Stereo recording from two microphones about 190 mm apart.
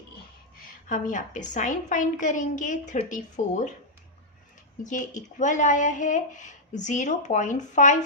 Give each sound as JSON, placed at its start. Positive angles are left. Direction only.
{"t": 0.5, "sound": "a woman's voice", "side_deg": 45}
{"t": 4.8, "sound": "speech", "side_deg": 40}